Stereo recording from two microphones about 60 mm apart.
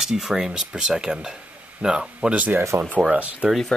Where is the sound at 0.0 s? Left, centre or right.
Centre; by 3.4 s right.